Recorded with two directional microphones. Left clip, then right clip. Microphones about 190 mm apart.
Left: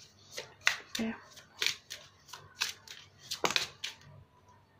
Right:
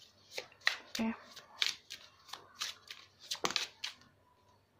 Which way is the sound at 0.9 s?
20° right (ahead or behind).